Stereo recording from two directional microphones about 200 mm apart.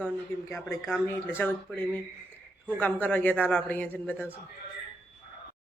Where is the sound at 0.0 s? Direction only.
10° left (ahead or behind).